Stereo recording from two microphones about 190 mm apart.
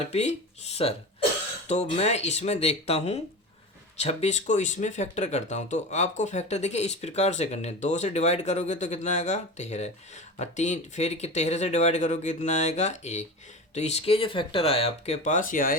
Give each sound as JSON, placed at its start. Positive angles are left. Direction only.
{"t": 0.1, "sound": "speech", "side_deg": 35}